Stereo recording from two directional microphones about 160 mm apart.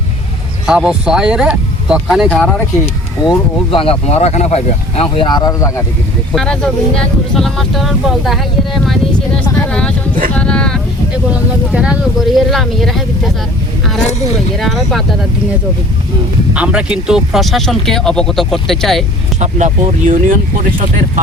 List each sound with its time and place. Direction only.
0.7 s speech: 5° right (ahead or behind)
2.8 s speech: 35° left (ahead or behind)
6.3 s speech: 5° left (ahead or behind)
11.1 s speech: 10° right (ahead or behind)
14.0 s speech: 45° left (ahead or behind)
14.5 s speech: centre (ahead or behind)
16.6 s speech: 5° right (ahead or behind)
19.4 s speech: 50° right (ahead or behind)